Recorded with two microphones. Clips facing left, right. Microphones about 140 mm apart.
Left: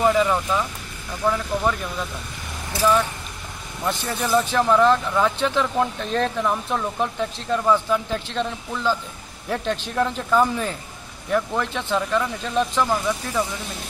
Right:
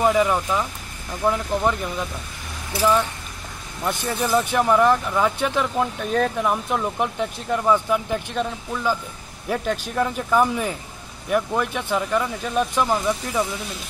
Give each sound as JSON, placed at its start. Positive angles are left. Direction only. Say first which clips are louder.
{"t": 0.0, "sound": "speech", "louder": "even", "side_deg": -10}
{"t": 3.8, "sound": "speech", "louder": "right 1 dB", "side_deg": -15}